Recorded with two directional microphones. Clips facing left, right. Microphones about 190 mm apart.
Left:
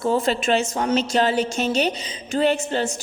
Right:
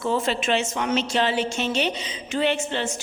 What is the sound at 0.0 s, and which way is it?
A woman's voice, 40° left (ahead or behind).